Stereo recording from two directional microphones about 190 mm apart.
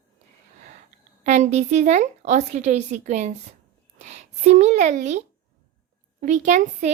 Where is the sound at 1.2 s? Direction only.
40° right (ahead or behind).